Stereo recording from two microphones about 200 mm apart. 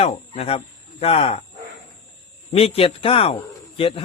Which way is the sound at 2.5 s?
30° left (ahead or behind).